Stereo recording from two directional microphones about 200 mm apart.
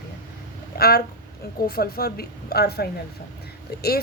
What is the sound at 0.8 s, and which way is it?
A woman's voice, 50° left (ahead or behind).